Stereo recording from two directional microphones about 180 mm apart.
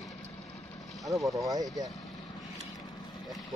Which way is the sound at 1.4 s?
20° right (ahead or behind).